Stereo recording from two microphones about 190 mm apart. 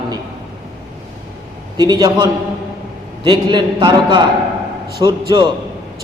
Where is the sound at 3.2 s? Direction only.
25° right (ahead or behind).